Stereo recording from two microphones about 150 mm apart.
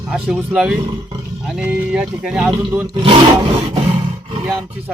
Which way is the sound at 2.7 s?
20° right (ahead or behind).